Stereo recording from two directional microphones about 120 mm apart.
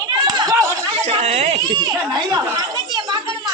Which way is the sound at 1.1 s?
55° right (ahead or behind).